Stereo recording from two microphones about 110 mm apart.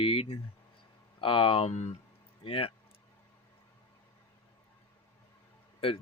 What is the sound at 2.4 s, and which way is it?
Speech, 55° left (ahead or behind).